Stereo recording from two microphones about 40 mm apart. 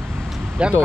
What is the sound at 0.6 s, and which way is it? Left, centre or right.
Speech, right.